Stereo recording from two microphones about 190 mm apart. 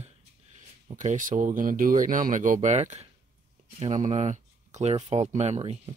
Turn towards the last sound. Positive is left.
turn(degrees=-35)  # may be behind; listen again after turning